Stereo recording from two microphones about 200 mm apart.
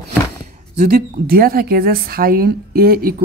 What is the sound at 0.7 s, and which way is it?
Speech, 50° right (ahead or behind).